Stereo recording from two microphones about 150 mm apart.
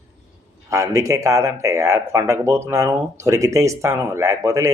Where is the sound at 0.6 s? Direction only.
20° right (ahead or behind).